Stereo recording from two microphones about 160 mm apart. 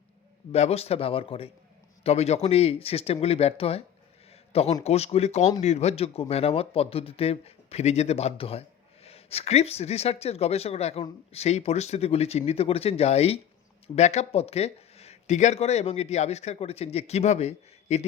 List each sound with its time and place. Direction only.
0.5 s speech: 40° left (ahead or behind)